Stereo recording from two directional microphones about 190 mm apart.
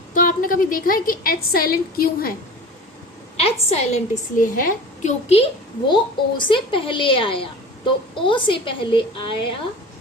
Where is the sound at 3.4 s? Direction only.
30° left (ahead or behind).